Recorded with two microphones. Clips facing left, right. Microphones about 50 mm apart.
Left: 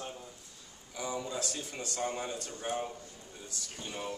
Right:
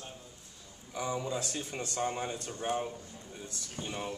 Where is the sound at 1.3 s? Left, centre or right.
Right.